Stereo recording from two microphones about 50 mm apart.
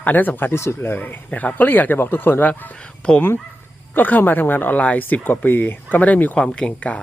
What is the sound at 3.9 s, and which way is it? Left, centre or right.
Speech, left.